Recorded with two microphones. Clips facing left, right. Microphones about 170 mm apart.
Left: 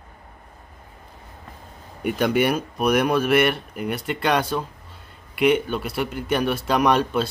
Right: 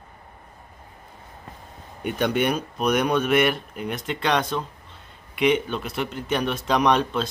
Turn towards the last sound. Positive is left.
turn(degrees=5)  # may be behind; listen again after turning